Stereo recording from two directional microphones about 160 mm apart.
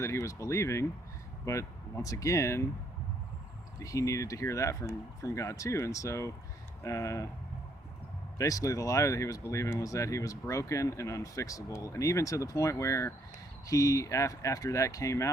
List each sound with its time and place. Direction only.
0.0 s speech: 15° left (ahead or behind)
3.8 s speech: 20° left (ahead or behind)
8.4 s speech: 20° left (ahead or behind)